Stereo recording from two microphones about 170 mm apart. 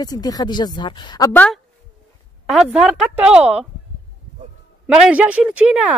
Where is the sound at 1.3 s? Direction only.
10° left (ahead or behind).